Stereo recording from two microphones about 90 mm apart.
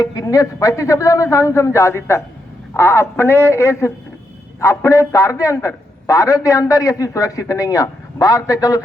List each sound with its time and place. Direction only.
0.0 s a man's voice: 40° left (ahead or behind)